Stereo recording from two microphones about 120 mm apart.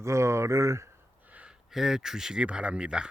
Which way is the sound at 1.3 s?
10° right (ahead or behind).